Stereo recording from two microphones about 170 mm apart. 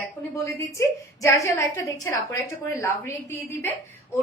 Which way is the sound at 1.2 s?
20° left (ahead or behind).